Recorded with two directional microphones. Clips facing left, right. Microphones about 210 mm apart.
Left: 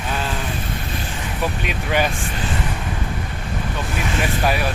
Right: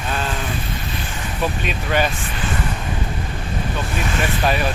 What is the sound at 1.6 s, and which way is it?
Speech, 10° left (ahead or behind).